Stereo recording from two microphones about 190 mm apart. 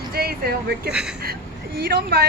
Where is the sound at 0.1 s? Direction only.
55° right (ahead or behind).